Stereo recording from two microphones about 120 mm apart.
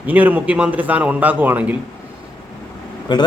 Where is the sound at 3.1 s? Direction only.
35° left (ahead or behind).